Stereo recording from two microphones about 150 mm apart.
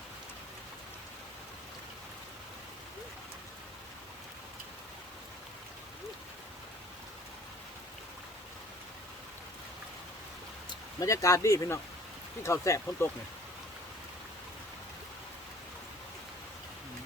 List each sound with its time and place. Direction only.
11.0 s speech: 20° left (ahead or behind)